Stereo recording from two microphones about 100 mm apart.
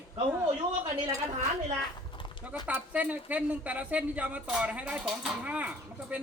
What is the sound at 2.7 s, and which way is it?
A woman's voice, 15° right (ahead or behind).